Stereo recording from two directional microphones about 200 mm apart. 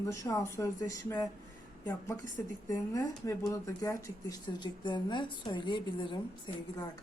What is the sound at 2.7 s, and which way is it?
Speech, 15° left (ahead or behind).